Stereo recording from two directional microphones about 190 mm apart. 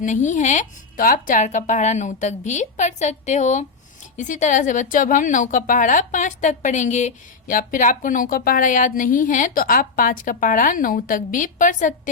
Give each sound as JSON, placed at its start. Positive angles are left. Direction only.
{"t": 0.0, "sound": "a woman's voice", "side_deg": 40}